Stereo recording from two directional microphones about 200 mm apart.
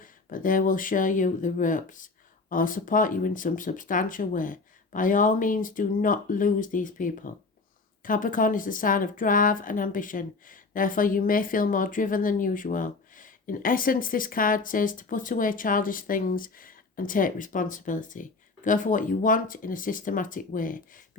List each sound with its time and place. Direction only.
0.0 s a woman's voice: 45° left (ahead or behind)